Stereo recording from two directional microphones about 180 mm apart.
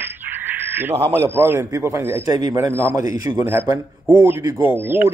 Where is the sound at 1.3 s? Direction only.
15° right (ahead or behind).